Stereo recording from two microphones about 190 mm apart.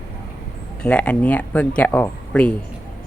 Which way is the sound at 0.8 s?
5° left (ahead or behind).